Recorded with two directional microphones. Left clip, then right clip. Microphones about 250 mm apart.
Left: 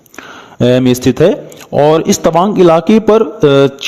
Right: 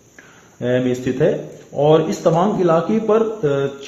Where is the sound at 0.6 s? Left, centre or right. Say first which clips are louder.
Left 9 dB; left.